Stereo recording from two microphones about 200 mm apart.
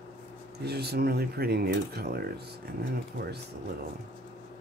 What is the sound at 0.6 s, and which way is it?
Speech, 55° right (ahead or behind).